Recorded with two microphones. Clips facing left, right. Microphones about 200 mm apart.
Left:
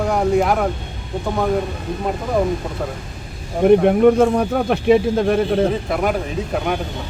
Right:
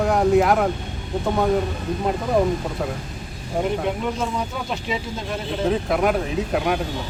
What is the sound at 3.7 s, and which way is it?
Speech, 60° left (ahead or behind).